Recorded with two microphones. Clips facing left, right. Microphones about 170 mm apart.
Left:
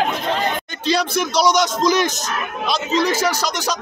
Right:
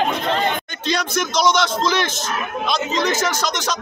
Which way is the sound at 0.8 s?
35° left (ahead or behind).